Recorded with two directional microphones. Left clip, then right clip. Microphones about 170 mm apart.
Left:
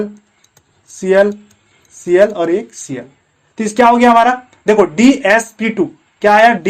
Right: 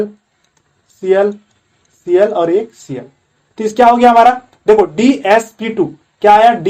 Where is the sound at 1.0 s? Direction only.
40° left (ahead or behind).